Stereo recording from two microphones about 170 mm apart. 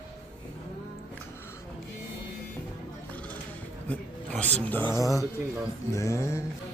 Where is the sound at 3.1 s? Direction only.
10° left (ahead or behind).